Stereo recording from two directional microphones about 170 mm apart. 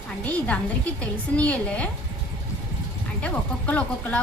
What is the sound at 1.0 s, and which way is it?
Speech, 10° left (ahead or behind).